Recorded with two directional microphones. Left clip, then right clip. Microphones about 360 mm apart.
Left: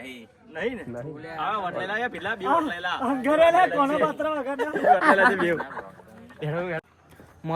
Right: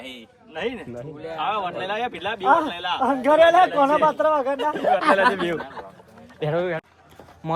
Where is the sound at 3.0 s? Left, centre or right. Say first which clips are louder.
Right 4 dB; right.